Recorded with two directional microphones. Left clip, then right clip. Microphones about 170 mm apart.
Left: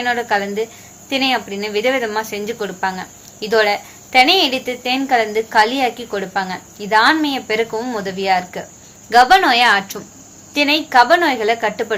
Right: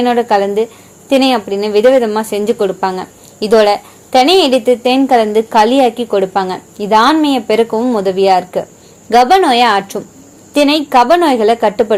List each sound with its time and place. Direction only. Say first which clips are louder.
0.0 s speech: right 7 dB; 40° right (ahead or behind)